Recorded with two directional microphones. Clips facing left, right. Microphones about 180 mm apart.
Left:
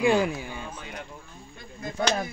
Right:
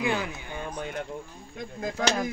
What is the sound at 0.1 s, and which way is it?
Speech, 25° left (ahead or behind).